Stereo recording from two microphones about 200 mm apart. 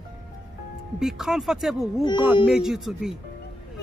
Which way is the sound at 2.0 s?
25° left (ahead or behind).